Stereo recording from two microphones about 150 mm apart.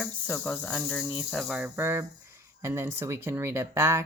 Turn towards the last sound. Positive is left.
turn(degrees=-15)  # may be behind; listen again after turning